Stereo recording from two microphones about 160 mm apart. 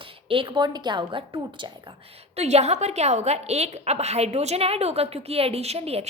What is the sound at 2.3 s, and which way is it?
A woman's voice, 40° right (ahead or behind).